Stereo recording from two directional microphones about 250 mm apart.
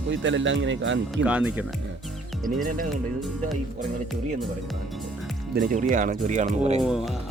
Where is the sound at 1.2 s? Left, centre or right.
Centre.